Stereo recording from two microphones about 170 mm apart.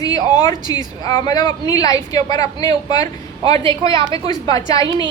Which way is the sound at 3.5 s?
30° right (ahead or behind).